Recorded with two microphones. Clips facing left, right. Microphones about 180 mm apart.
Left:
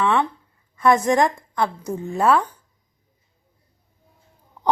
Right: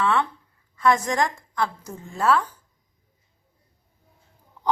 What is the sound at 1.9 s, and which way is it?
Speech, 60° left (ahead or behind).